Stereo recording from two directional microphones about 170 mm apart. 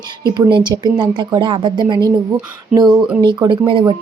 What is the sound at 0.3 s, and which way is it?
Speech, 25° right (ahead or behind).